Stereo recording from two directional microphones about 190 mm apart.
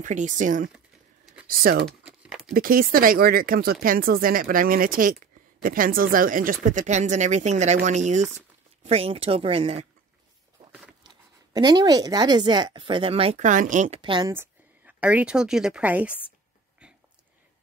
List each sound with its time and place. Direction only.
0.0 s a woman's voice: 40° right (ahead or behind)
1.9 s a sound: 5° right (ahead or behind)
2.5 s a woman's voice: 50° right (ahead or behind); by 9.8 s 30° right (ahead or behind)
11.1 s speech: 20° right (ahead or behind)
14.3 s a woman's voice: 10° right (ahead or behind)